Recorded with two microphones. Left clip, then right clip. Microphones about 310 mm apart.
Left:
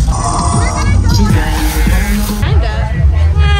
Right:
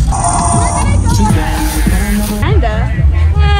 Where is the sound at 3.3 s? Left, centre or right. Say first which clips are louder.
Right 1 dB; centre.